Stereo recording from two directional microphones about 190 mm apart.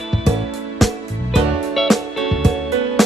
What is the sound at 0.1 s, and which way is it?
Music, centre (ahead or behind).